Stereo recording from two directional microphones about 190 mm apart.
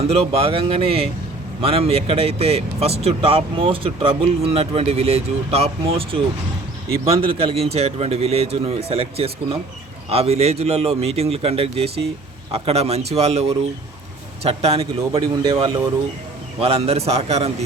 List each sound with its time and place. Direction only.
0.0 s a man's voice: 35° right (ahead or behind)
14.4 s a man's voice: 30° right (ahead or behind)